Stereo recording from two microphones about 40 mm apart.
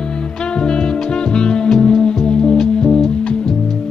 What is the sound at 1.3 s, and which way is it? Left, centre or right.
Music, left.